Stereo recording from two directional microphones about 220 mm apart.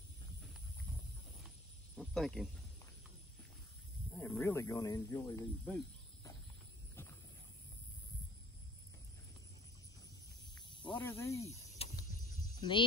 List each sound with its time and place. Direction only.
2.0 s cricket: centre (ahead or behind)
4.1 s snake: centre (ahead or behind)
4.4 s speech: 15° left (ahead or behind)
7.0 s a sound: 10° left (ahead or behind)
10.7 s snake: 20° left (ahead or behind)
11.0 s speech: 10° left (ahead or behind)
11.8 s a sound: 25° left (ahead or behind)